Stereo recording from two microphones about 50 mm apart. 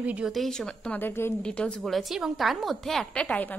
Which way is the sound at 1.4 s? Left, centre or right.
Centre.